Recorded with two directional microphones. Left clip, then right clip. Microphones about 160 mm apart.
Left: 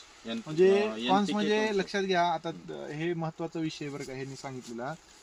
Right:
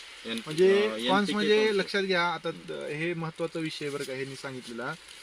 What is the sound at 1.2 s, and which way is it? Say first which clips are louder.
Speech: right 4 dB; 40° left (ahead or behind).